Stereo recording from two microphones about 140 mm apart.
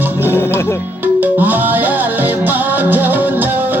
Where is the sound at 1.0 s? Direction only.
15° right (ahead or behind).